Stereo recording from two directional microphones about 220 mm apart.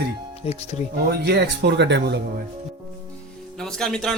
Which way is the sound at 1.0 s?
50° right (ahead or behind).